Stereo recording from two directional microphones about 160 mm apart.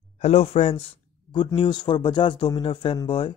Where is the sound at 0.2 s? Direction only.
40° left (ahead or behind).